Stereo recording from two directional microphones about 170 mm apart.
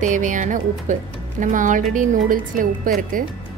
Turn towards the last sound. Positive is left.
turn(degrees=-55)  # may be behind; listen again after turning